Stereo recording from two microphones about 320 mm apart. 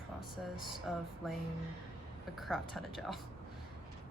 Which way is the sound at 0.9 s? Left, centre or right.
Centre.